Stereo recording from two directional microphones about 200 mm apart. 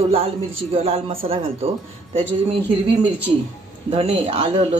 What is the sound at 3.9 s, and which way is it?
Speech, 30° right (ahead or behind).